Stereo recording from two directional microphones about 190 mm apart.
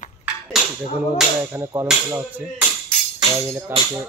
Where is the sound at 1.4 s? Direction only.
15° right (ahead or behind).